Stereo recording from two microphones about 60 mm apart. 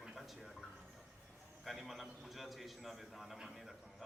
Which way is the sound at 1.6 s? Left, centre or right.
Centre.